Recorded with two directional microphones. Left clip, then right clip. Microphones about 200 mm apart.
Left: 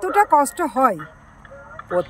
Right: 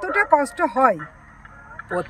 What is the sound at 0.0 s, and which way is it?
Speech, 10° left (ahead or behind).